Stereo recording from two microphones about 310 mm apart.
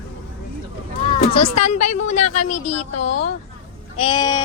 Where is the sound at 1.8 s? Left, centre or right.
Left.